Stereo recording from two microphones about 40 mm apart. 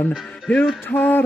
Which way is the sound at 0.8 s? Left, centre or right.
Left.